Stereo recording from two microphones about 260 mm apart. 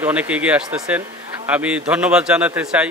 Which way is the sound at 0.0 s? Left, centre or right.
Centre.